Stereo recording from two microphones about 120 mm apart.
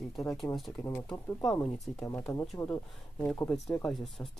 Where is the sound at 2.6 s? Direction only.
20° left (ahead or behind).